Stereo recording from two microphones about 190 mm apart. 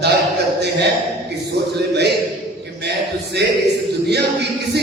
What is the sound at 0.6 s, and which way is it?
Speech, 60° right (ahead or behind).